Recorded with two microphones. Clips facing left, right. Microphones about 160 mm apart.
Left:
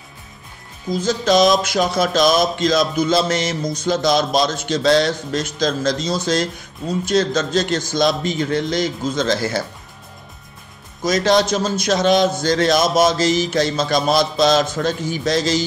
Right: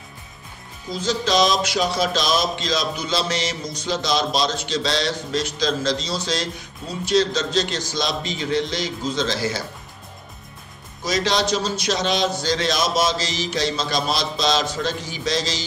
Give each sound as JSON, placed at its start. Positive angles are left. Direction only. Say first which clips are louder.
{"t": 1.0, "sound": "speech", "louder": "left 5 dB", "side_deg": 50}
{"t": 11.1, "sound": "speech", "louder": "left 5 dB", "side_deg": 50}